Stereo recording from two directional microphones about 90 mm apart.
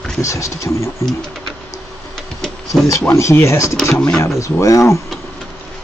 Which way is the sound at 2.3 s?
Centre (ahead or behind).